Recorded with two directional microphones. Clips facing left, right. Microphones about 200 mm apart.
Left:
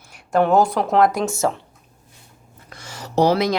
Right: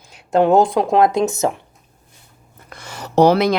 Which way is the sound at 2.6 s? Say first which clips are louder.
Right 3 dB; 60° right (ahead or behind).